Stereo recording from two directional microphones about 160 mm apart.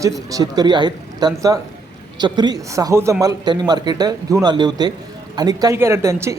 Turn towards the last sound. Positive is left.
turn(degrees=-20)  # may be behind; listen again after turning